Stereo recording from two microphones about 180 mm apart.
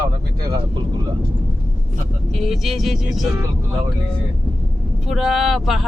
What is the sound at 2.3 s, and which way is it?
Speech, centre (ahead or behind).